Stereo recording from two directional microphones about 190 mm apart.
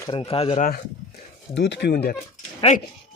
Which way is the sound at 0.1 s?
30° left (ahead or behind).